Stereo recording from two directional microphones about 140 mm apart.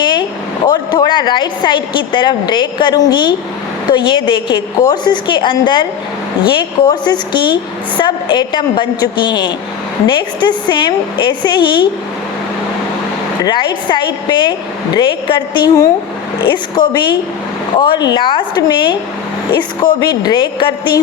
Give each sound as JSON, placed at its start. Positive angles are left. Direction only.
{"t": 0.0, "sound": "a woman's voice", "side_deg": 35}
{"t": 13.4, "sound": "a woman's voice", "side_deg": 35}